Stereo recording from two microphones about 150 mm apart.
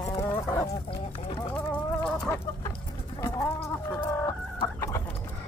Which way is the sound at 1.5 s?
10° left (ahead or behind).